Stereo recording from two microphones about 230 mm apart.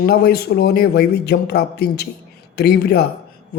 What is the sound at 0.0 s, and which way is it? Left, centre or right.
Speech, left.